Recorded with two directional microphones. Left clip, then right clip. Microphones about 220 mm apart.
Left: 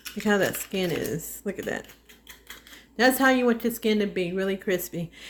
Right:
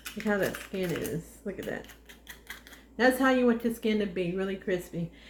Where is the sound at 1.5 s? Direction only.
50° left (ahead or behind).